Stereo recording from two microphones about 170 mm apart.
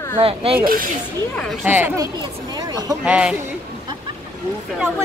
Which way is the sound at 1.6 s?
10° right (ahead or behind).